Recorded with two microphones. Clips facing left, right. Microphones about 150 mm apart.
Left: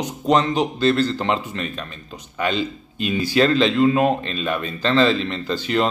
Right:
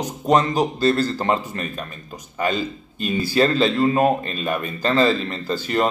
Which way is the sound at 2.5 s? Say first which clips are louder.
Left 1 dB; 45° right (ahead or behind).